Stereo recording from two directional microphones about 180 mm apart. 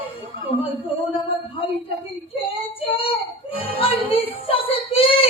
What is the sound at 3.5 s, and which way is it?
Music, 30° left (ahead or behind).